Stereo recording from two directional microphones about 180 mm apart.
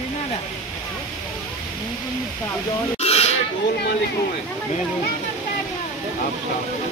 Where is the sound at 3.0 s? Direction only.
35° left (ahead or behind).